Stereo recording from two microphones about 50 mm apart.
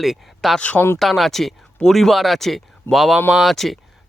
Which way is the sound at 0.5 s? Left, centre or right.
Left.